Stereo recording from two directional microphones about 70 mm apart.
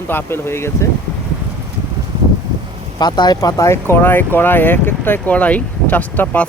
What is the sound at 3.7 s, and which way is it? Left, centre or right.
Speech, left.